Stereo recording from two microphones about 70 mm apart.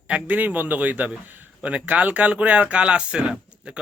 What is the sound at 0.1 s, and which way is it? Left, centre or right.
A man's voice, right.